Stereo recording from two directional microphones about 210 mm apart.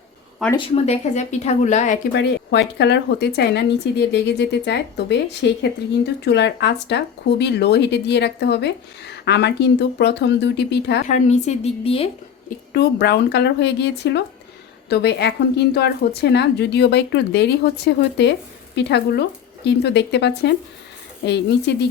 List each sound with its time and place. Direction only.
0.5 s speech: 25° left (ahead or behind)
2.1 s speech: 55° left (ahead or behind)
11.0 s speech: 35° left (ahead or behind)
12.7 s speech: 50° left (ahead or behind)